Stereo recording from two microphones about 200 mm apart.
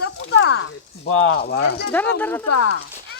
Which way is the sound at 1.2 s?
55° left (ahead or behind).